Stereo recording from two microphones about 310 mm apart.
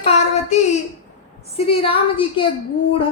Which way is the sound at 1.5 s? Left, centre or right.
Centre.